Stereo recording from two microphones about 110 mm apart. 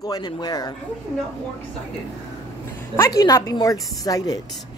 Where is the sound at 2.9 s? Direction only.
25° left (ahead or behind).